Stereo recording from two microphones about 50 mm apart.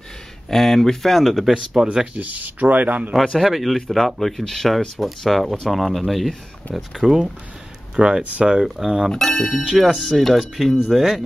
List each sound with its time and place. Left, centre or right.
0.5 s speech: centre
1.5 s speech: centre
2.1 s speech: right
3.3 s speech: centre
7.9 s speech: centre
8.6 s speech: centre